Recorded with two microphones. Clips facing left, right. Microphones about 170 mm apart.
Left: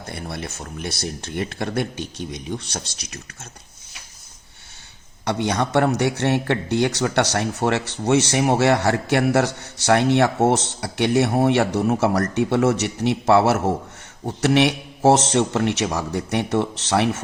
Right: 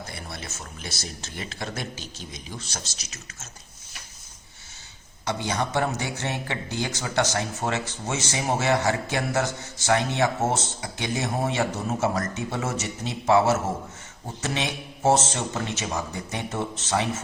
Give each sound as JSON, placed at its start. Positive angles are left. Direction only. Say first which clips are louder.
{"t": 0.1, "sound": "speech", "louder": "left 7 dB", "side_deg": 60}
{"t": 5.2, "sound": "a man's voice", "louder": "left 5 dB", "side_deg": 65}